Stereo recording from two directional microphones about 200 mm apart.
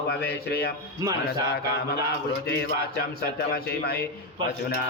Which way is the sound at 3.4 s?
55° left (ahead or behind).